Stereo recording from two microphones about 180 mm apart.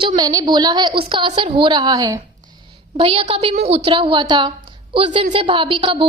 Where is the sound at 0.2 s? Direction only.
20° right (ahead or behind).